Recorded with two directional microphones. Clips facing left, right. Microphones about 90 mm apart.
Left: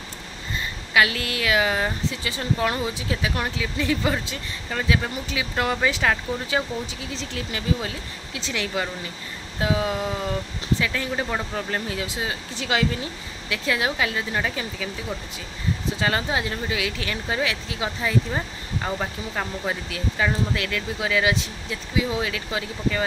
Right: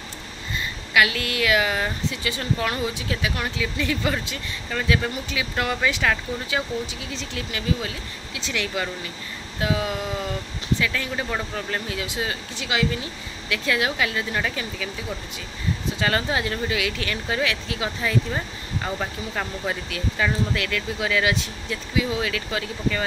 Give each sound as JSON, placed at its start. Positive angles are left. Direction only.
{"t": 0.9, "sound": "speech", "side_deg": 30}
{"t": 13.5, "sound": "speech", "side_deg": 25}
{"t": 16.0, "sound": "speech", "side_deg": 20}
{"t": 19.9, "sound": "speech", "side_deg": 20}